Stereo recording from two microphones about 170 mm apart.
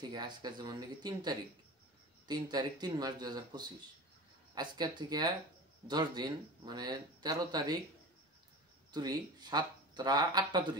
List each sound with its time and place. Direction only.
0.0 s speech: 25° right (ahead or behind)
8.9 s speech: 25° right (ahead or behind)